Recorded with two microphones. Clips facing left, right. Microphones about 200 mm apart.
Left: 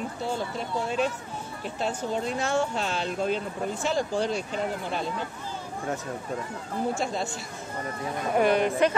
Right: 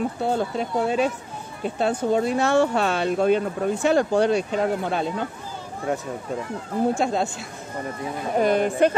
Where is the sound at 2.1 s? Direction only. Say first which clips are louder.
Right 7 dB; 65° right (ahead or behind).